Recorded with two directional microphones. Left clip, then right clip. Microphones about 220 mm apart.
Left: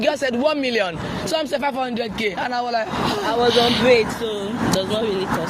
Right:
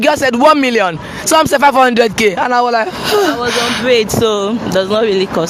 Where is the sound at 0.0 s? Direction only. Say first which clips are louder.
Right 10 dB; 45° right (ahead or behind).